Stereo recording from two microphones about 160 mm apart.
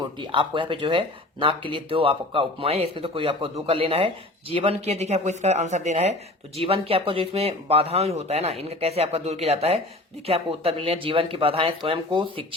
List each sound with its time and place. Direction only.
0.0 s speech: 30° right (ahead or behind)